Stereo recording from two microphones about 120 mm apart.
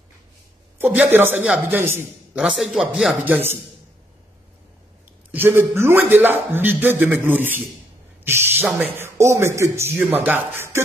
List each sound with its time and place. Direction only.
0.7 s a man's voice: 20° right (ahead or behind)
2.3 s speech: 5° right (ahead or behind)
3.3 s a man's voice: 20° right (ahead or behind)
5.3 s a man's voice: 20° right (ahead or behind)